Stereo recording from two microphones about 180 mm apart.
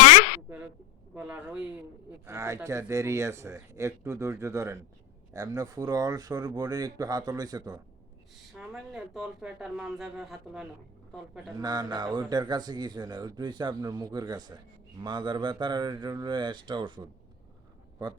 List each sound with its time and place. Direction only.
0.0 s a sound: 40° left (ahead or behind)
1.1 s speech: 5° right (ahead or behind)
8.5 s a man's voice: 5° right (ahead or behind)
11.6 s speech: 20° right (ahead or behind)